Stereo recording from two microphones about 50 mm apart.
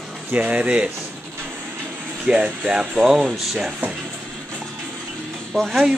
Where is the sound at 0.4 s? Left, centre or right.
Right.